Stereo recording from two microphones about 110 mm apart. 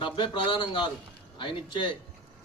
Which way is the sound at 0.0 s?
45° left (ahead or behind).